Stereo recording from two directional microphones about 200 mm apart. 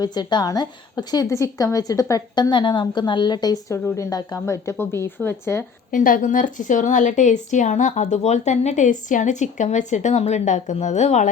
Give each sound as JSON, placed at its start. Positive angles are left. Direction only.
{"t": 0.0, "sound": "a woman's voice", "side_deg": 20}
{"t": 5.9, "sound": "a woman's voice", "side_deg": 40}